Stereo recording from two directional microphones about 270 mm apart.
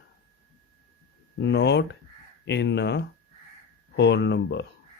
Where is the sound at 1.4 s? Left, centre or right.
Left.